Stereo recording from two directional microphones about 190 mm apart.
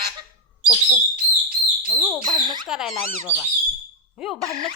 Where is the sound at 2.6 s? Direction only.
Centre (ahead or behind).